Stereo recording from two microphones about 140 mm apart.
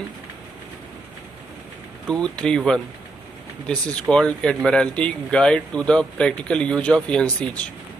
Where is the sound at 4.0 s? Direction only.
5° left (ahead or behind).